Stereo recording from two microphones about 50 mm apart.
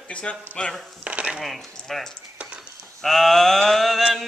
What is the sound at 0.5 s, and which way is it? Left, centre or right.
Speech, left.